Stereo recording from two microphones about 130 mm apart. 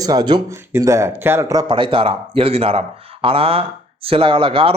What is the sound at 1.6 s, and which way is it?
Speech, 40° right (ahead or behind).